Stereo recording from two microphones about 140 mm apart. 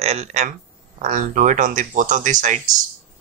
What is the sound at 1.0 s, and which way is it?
Speech, 65° right (ahead or behind).